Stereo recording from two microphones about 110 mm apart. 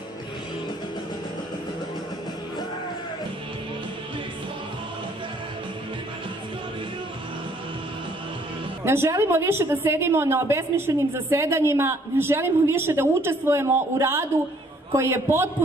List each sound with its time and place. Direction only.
8.8 s a woman's voice: 25° right (ahead or behind)